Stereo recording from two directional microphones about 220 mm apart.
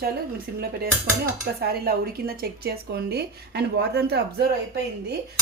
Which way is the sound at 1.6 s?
45° right (ahead or behind).